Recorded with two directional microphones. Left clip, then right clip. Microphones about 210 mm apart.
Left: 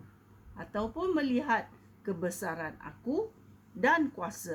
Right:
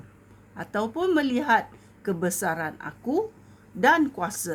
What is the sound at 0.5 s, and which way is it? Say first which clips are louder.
Speech: right 7 dB; 35° right (ahead or behind).